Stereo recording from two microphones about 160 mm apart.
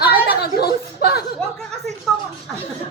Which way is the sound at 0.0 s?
75° left (ahead or behind).